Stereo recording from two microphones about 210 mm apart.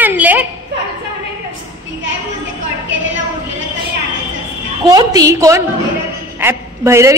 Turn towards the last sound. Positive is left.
turn(degrees=-15)  # may be behind; listen again after turning